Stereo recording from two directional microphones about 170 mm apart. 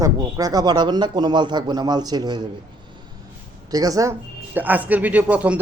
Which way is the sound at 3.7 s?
20° right (ahead or behind).